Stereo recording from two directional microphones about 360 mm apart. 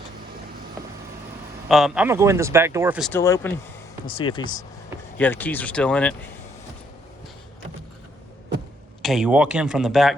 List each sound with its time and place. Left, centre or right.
1.6 s speech: centre
9.0 s speech: centre